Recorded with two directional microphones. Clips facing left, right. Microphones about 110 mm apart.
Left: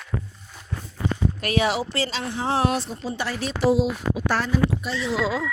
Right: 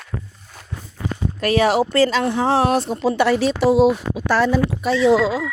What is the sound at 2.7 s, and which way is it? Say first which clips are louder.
Speech: right 10 dB; 65° right (ahead or behind).